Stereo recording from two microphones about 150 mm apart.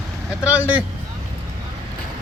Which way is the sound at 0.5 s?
10° right (ahead or behind).